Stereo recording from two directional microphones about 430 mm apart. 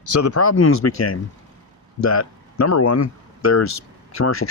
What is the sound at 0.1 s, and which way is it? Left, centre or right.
Speech, left.